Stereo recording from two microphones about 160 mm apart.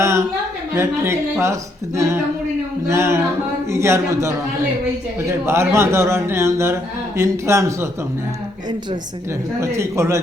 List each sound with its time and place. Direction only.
0.0 s a sound: 20° right (ahead or behind)
0.7 s a man's voice: 15° right (ahead or behind)
2.8 s a man's voice: 15° right (ahead or behind)
9.6 s a man's voice: 15° right (ahead or behind)